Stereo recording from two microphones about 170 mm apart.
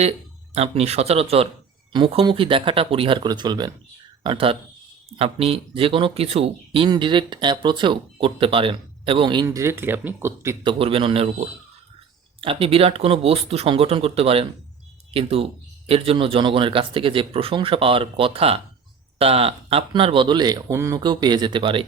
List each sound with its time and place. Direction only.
0.5 s speech: 40° right (ahead or behind); by 10.6 s 15° right (ahead or behind)
10.6 s speech: 30° right (ahead or behind)